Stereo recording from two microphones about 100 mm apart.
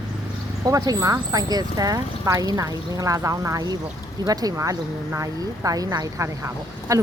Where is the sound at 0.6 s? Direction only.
35° right (ahead or behind).